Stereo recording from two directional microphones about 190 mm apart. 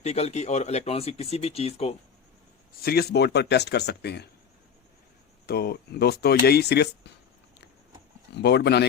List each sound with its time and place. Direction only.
0.0 s speech: 35° left (ahead or behind)
2.8 s speech: 55° left (ahead or behind)
5.5 s speech: 55° left (ahead or behind)
8.4 s speech: 60° left (ahead or behind)